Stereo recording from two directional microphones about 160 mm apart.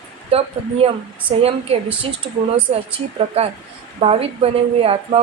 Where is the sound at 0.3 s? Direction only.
40° right (ahead or behind).